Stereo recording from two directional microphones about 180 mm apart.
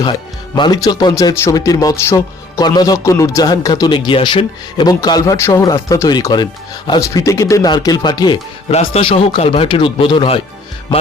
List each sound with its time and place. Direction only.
0.5 s speech: 20° left (ahead or behind)
8.7 s speech: 35° left (ahead or behind)